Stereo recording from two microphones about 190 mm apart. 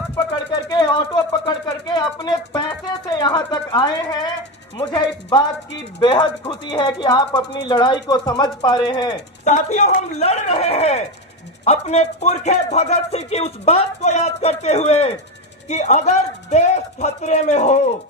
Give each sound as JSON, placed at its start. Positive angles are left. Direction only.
{"t": 0.7, "sound": "speech", "side_deg": 20}
{"t": 9.4, "sound": "music", "side_deg": 40}